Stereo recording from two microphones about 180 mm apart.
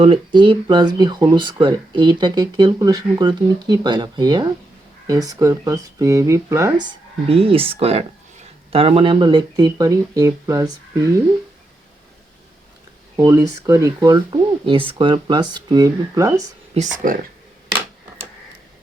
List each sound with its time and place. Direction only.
0.0 s speech: 30° right (ahead or behind)
7.3 s speech: 30° right (ahead or behind)
13.1 s speech: 20° right (ahead or behind)
17.0 s speech: 50° right (ahead or behind)